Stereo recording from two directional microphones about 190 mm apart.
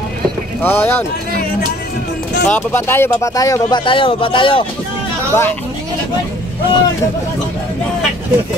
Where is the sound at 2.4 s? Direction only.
10° left (ahead or behind); by 4.7 s 25° left (ahead or behind).